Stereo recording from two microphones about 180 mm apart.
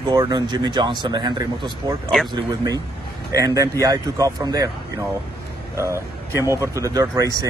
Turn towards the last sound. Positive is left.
turn(degrees=-20)  # may be behind; listen again after turning